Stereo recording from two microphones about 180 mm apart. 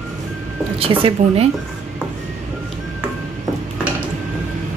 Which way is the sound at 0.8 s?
30° right (ahead or behind).